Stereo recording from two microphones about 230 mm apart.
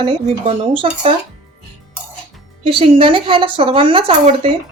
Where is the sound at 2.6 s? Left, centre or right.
Right.